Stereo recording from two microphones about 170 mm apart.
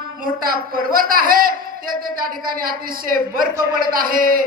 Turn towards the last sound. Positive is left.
turn(degrees=-55)  # may be behind; listen again after turning